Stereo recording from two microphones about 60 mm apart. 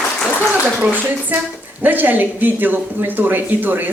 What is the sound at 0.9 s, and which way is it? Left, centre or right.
Speech, right.